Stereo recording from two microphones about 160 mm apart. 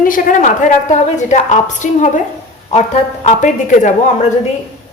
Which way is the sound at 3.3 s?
50° left (ahead or behind).